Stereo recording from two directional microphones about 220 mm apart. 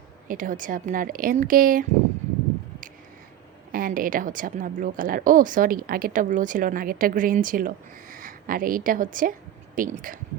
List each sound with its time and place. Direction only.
0.3 s a woman's voice: 40° right (ahead or behind)
3.7 s a woman's voice: 40° right (ahead or behind)